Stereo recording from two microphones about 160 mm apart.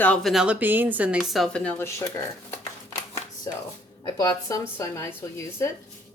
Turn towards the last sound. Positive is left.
turn(degrees=15)  # may be behind; listen again after turning